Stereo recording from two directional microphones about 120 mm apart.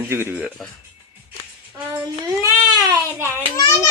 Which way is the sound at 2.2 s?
25° right (ahead or behind).